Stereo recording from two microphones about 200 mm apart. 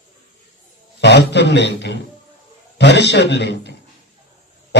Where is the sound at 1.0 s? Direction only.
60° left (ahead or behind).